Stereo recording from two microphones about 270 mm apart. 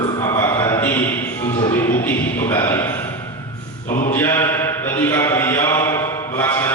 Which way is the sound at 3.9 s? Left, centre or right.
Left.